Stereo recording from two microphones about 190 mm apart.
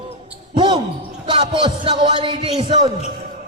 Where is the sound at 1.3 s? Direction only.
25° right (ahead or behind).